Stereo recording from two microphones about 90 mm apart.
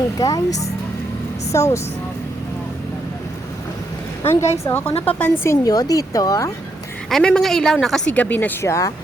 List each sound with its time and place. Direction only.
0.2 s speech: 45° left (ahead or behind)
4.3 s speech: 30° left (ahead or behind)
5.6 s speech: 45° left (ahead or behind)
7.1 s a woman's voice: 10° left (ahead or behind)
8.1 s speech: 15° left (ahead or behind)
8.6 s speech: 35° left (ahead or behind)